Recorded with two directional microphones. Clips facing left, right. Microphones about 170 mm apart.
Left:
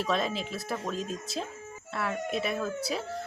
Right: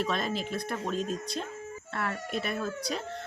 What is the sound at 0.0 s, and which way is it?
Speech, centre (ahead or behind).